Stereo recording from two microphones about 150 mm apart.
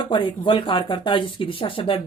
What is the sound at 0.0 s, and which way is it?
Speech, 30° left (ahead or behind).